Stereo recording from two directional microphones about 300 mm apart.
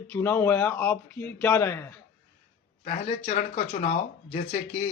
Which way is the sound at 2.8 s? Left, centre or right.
Left.